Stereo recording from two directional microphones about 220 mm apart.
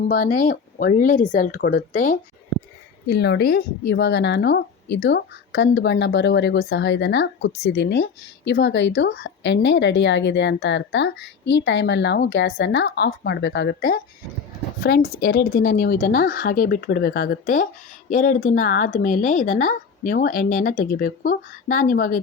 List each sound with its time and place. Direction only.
0.1 s speech: 40° left (ahead or behind)
3.1 s a woman's voice: 50° left (ahead or behind)
15.1 s a woman's voice: 45° left (ahead or behind)